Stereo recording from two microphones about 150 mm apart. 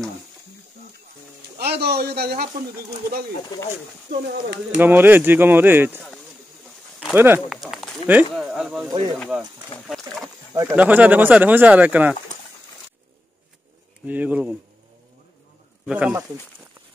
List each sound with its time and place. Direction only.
1.6 s a man's voice: 90° right
4.7 s speech: 15° right (ahead or behind)
7.2 s speech: 15° right (ahead or behind)
7.4 s a sound: centre (ahead or behind)
8.1 s speech: 10° right (ahead or behind)
9.8 s a sound: centre (ahead or behind)
10.5 s speech: 20° right (ahead or behind)
14.0 s speech: 10° right (ahead or behind)
15.8 s speech: 10° right (ahead or behind)